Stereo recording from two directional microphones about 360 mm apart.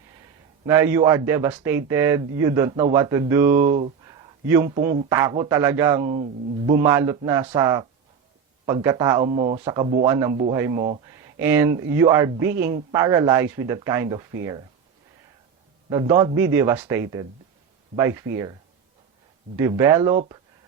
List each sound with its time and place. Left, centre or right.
0.6 s a man's voice: centre
3.7 s a man's voice: centre
15.9 s a man's voice: centre
19.5 s a man's voice: centre